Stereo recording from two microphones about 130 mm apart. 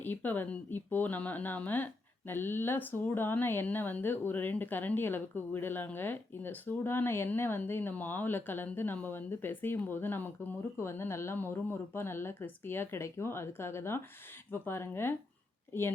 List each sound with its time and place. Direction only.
0.0 s speech: 15° left (ahead or behind)